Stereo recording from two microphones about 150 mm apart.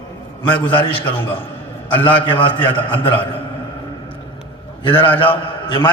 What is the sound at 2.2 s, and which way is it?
Speech, 35° left (ahead or behind).